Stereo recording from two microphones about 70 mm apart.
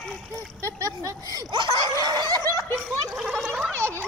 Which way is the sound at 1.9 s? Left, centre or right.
Right.